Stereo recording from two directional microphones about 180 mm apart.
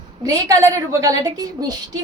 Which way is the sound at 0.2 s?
20° right (ahead or behind).